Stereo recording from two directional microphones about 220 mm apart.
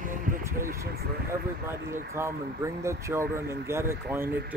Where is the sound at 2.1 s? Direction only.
10° right (ahead or behind).